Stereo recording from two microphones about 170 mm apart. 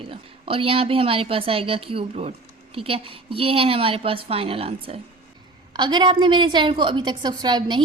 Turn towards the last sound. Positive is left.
turn(degrees=-25)  # may be behind; listen again after turning